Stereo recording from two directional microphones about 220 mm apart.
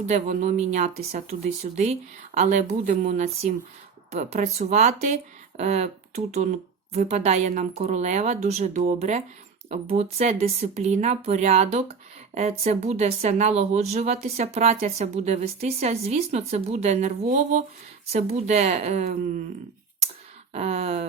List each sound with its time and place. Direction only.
0.1 s speech: 35° right (ahead or behind)
20.5 s speech: 30° right (ahead or behind)